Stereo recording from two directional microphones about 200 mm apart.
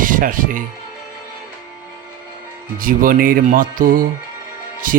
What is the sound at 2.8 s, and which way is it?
Speech, 45° right (ahead or behind).